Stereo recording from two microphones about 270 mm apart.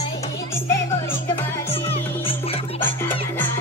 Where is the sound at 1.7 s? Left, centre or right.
Left.